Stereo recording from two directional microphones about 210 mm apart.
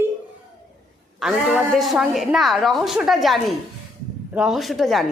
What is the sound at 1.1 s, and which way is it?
A woman's voice, centre (ahead or behind).